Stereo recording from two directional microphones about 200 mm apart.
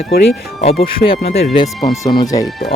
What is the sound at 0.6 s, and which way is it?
Speech, 30° left (ahead or behind).